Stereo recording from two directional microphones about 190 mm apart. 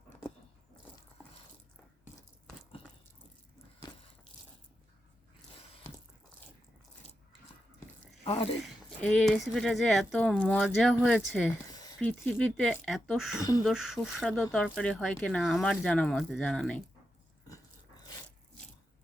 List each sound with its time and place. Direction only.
8.2 s speech: 30° left (ahead or behind)
8.6 s speech: 5° left (ahead or behind)
11.7 s a sound: 20° left (ahead or behind)
11.9 s speech: 5° left (ahead or behind)
17.5 s dog: 20° left (ahead or behind)